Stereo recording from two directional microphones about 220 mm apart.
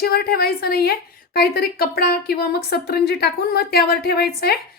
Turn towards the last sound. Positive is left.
turn(degrees=45)  # may be behind; listen again after turning